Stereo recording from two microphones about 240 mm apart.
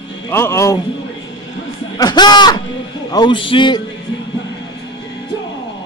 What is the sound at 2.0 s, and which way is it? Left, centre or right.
A man's voice, centre.